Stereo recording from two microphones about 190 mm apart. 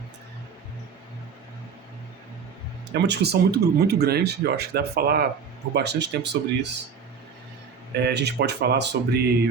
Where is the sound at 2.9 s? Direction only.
60° right (ahead or behind).